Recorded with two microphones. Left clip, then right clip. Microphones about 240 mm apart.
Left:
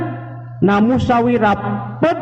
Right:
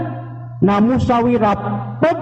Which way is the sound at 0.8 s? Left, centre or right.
Right.